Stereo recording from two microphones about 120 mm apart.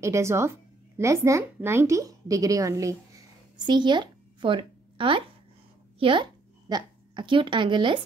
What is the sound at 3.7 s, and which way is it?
A woman's voice, 40° right (ahead or behind).